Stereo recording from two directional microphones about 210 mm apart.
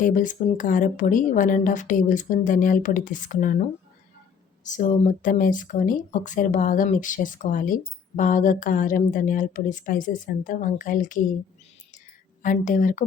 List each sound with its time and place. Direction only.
0.0 s speech: 40° left (ahead or behind)
4.6 s speech: 35° left (ahead or behind)
12.4 s speech: 40° left (ahead or behind)